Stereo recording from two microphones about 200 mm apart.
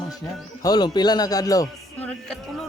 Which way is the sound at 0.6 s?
20° left (ahead or behind).